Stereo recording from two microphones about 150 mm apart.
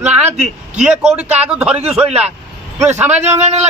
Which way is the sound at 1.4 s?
5° right (ahead or behind).